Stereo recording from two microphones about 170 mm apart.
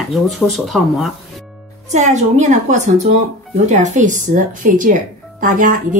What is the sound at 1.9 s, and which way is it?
Speech, 40° right (ahead or behind).